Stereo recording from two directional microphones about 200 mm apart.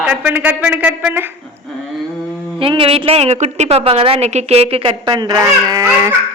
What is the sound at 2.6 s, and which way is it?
A woman's voice, 25° right (ahead or behind).